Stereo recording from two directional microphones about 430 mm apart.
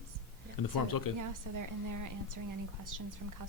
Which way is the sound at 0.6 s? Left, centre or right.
Left.